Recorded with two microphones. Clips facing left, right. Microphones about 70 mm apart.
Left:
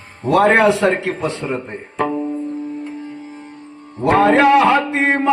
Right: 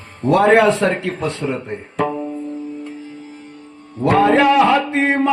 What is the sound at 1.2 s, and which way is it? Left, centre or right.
Speech, centre.